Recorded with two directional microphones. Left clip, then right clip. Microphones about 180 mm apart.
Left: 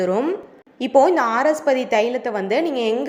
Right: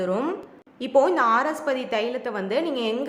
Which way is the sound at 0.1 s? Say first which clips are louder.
Left 5 dB; 10° left (ahead or behind).